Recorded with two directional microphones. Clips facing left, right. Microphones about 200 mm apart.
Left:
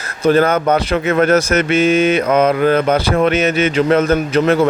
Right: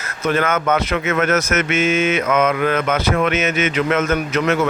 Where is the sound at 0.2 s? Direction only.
35° left (ahead or behind).